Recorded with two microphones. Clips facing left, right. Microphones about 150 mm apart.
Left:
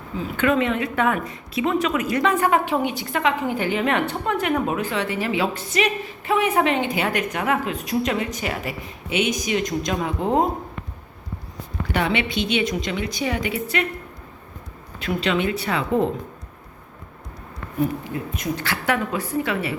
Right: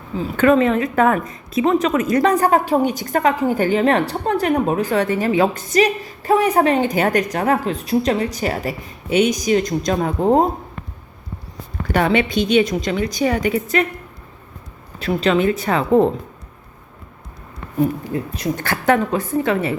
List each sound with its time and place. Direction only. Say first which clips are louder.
0.2 s a woman's voice: right 6 dB; 40° right (ahead or behind)
11.9 s a woman's voice: right 6 dB; 40° right (ahead or behind)
14.9 s a woman's voice: right 5 dB; 40° right (ahead or behind)
18.1 s a woman's voice: right 5 dB; 35° right (ahead or behind)
18.5 s a woman's voice: right 7 dB; 50° right (ahead or behind)